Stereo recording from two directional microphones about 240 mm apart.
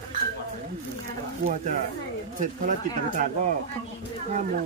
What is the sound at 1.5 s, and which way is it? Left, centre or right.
Speech, right.